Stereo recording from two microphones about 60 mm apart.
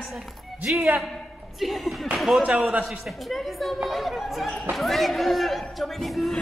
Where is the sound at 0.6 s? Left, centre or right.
Right.